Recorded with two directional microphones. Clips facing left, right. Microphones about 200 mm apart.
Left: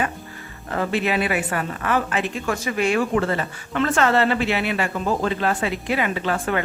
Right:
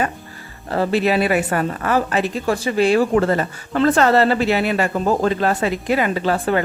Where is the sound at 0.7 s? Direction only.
35° right (ahead or behind).